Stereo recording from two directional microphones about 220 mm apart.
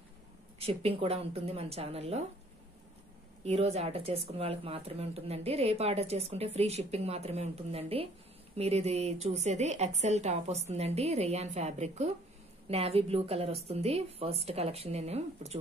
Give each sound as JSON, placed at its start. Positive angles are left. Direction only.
{"t": 0.6, "sound": "speech", "side_deg": -25}
{"t": 3.4, "sound": "a woman's voice", "side_deg": -30}